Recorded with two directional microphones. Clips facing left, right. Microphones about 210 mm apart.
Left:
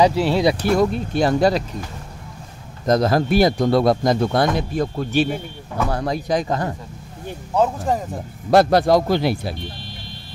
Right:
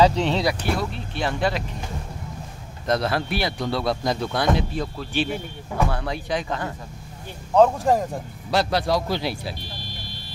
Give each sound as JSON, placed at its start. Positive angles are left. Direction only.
{"t": 0.0, "sound": "speech", "side_deg": 10}
{"t": 0.6, "sound": "speech", "side_deg": 45}
{"t": 2.9, "sound": "a man's voice", "side_deg": 40}
{"t": 7.5, "sound": "speech", "side_deg": 0}
{"t": 8.5, "sound": "a man's voice", "side_deg": 50}